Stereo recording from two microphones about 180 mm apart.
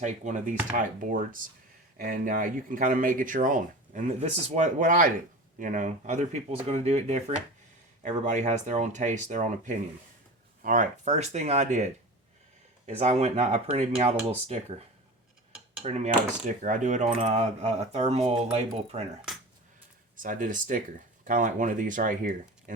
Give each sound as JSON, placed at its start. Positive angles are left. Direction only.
{"t": 0.0, "sound": "speech", "side_deg": -40}
{"t": 15.8, "sound": "speech", "side_deg": -40}
{"t": 20.1, "sound": "speech", "side_deg": -50}